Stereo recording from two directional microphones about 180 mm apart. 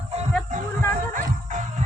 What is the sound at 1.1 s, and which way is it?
Music, 45° right (ahead or behind).